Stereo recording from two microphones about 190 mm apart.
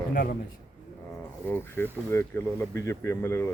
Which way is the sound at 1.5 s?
10° left (ahead or behind).